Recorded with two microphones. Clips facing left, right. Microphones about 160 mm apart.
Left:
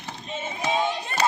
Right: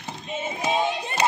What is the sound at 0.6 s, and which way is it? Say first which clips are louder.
Crowd: right 1 dB; 25° right (ahead or behind).